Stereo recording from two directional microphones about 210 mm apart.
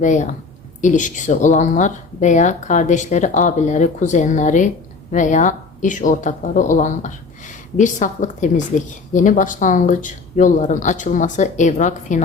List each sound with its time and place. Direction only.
0.0 s a woman's voice: 35° left (ahead or behind)